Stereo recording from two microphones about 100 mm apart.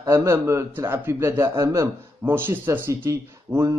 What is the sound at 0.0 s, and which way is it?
Speech, 30° right (ahead or behind).